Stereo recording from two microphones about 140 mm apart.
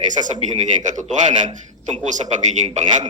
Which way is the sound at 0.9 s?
60° right (ahead or behind).